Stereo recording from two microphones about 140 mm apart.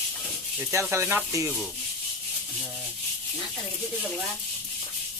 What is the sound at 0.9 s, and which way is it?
Speech, 15° right (ahead or behind).